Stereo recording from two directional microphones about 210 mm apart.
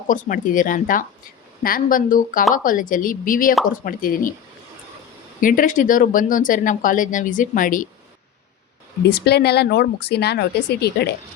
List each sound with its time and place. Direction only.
0.1 s speech: 40° left (ahead or behind)
5.4 s speech: 40° left (ahead or behind)
9.0 s speech: 50° left (ahead or behind)